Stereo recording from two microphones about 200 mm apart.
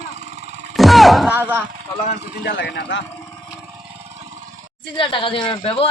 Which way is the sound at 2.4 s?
60° left (ahead or behind).